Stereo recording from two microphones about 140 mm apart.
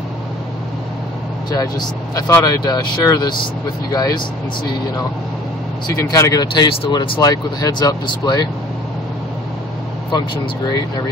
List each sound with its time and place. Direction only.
1.5 s speech: 30° left (ahead or behind)
5.9 s speech: 25° left (ahead or behind)